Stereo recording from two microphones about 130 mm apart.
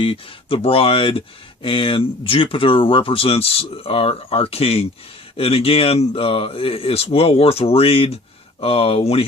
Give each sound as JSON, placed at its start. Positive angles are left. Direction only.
{"t": 0.0, "sound": "speech", "side_deg": 45}